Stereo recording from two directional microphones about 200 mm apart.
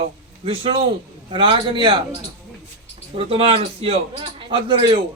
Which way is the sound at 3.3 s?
30° right (ahead or behind).